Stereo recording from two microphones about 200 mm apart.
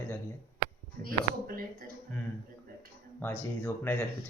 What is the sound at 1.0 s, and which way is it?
Speech, 45° right (ahead or behind).